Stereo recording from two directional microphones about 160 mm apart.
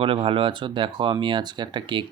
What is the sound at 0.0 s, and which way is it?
Speech, 35° right (ahead or behind).